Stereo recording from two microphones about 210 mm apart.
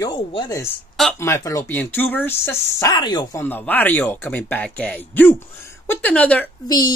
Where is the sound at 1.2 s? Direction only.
15° left (ahead or behind).